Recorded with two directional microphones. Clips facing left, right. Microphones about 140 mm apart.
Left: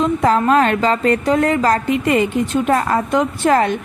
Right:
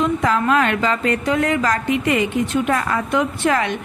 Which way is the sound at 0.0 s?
35° left (ahead or behind).